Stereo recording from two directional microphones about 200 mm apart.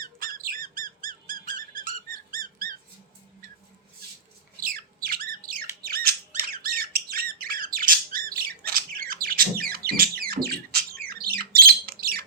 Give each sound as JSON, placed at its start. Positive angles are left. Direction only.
{"t": 0.0, "sound": "squeak", "side_deg": -45}
{"t": 4.6, "sound": "squawk", "side_deg": -45}
{"t": 9.2, "sound": "a sound", "side_deg": -45}